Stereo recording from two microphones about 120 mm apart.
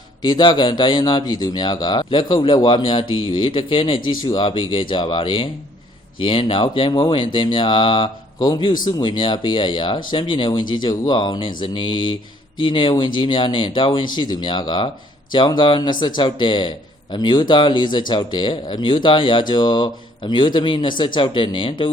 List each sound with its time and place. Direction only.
0.2 s speech: 40° left (ahead or behind)